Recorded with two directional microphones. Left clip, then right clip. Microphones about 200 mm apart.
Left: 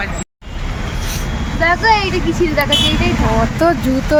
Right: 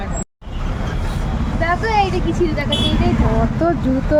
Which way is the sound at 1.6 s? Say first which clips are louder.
Left 4 dB; 40° left (ahead or behind).